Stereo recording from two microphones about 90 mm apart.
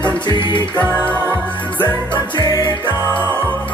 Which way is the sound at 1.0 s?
25° right (ahead or behind).